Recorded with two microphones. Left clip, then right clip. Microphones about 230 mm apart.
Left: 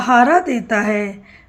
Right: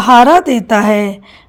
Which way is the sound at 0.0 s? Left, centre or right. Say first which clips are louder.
Right 6 dB; right.